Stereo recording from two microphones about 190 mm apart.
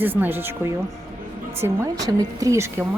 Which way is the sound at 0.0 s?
10° right (ahead or behind).